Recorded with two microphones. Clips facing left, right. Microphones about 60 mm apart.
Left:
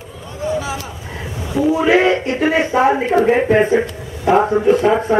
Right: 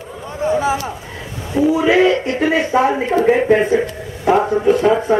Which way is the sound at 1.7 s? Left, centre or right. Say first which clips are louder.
Even; left.